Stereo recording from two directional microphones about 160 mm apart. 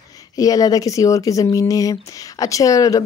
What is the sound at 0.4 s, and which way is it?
Speech, 20° left (ahead or behind).